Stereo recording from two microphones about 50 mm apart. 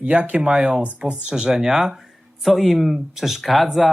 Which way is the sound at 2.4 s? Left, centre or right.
Centre.